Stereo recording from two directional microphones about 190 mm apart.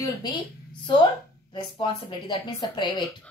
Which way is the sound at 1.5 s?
25° left (ahead or behind).